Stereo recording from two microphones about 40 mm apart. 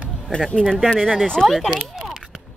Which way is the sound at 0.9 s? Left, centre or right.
Centre.